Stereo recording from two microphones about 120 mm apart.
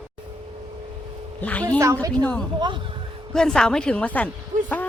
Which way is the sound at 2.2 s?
10° left (ahead or behind).